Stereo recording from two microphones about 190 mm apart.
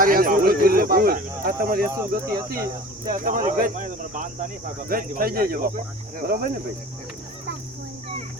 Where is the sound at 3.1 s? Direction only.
45° right (ahead or behind).